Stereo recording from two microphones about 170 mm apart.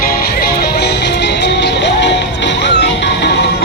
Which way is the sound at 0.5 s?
80° left.